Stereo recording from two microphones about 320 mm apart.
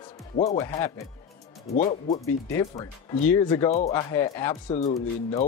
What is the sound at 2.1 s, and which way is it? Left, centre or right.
Speech, centre.